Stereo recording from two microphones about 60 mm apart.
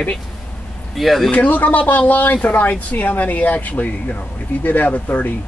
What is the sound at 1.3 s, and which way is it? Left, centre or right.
Speech, left.